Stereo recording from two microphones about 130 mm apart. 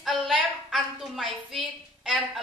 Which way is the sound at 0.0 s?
Centre (ahead or behind).